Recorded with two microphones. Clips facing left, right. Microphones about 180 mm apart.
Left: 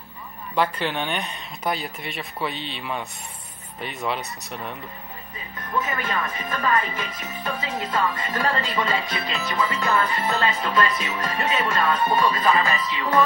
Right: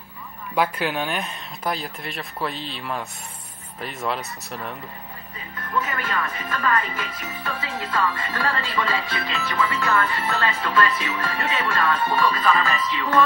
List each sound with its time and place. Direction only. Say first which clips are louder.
0.6 s speech: right 1 dB; 10° right (ahead or behind)
5.7 s speech: even; 20° left (ahead or behind)